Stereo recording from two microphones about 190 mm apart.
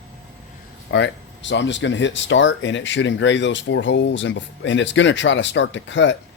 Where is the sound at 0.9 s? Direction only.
70° left (ahead or behind).